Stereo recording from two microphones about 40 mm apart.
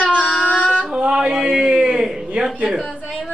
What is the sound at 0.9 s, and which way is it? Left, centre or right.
A man's voice, right.